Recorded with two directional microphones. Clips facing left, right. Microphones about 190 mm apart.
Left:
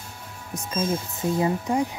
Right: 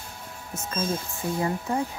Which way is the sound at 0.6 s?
15° left (ahead or behind).